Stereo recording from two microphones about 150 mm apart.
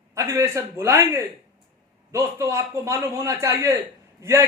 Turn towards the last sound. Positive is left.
turn(degrees=-20)  # may be behind; listen again after turning